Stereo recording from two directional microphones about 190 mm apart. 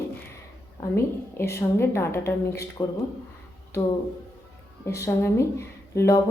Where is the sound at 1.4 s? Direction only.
15° left (ahead or behind).